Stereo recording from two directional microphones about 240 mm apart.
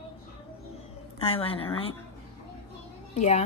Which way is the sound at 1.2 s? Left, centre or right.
Left.